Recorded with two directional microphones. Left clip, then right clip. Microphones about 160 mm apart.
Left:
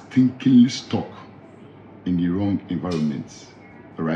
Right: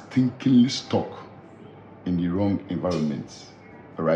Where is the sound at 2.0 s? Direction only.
20° right (ahead or behind).